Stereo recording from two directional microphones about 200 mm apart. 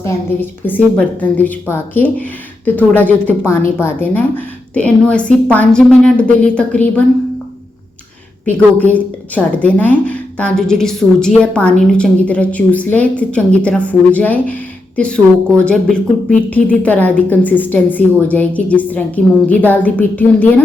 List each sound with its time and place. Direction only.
0.6 s a woman's voice: 10° left (ahead or behind)
8.4 s a woman's voice: 5° left (ahead or behind)